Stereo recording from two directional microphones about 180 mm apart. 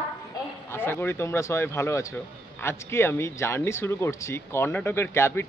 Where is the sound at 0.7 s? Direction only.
10° left (ahead or behind).